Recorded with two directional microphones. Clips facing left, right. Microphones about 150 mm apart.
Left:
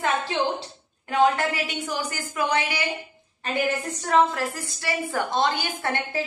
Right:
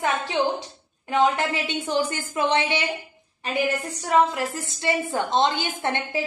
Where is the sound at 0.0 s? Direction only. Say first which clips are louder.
Right 1 dB; 15° right (ahead or behind).